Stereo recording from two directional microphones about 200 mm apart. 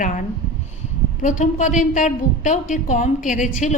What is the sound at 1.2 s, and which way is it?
A woman's voice, 35° left (ahead or behind).